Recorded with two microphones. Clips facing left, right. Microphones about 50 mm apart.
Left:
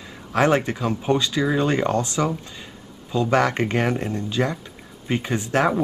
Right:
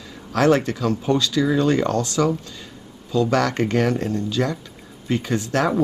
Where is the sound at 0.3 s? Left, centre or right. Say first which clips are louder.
Right 1 dB; left.